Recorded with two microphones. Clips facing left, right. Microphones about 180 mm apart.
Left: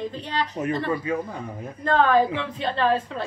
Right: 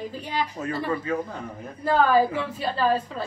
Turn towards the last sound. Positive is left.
turn(degrees=0)  # may be behind; listen again after turning